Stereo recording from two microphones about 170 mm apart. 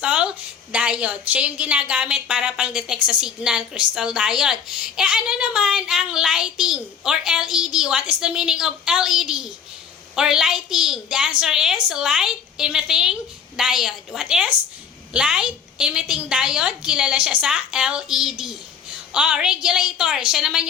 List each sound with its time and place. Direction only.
0.0 s a woman's voice: 5° right (ahead or behind)